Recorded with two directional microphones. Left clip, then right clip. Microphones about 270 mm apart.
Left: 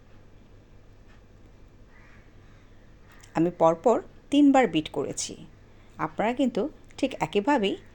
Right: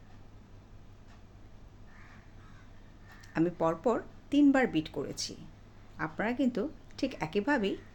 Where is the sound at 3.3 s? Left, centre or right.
Centre.